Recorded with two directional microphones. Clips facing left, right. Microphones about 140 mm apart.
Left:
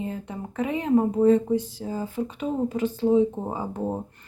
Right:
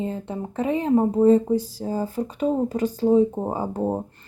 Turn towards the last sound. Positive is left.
turn(degrees=-35)  # may be behind; listen again after turning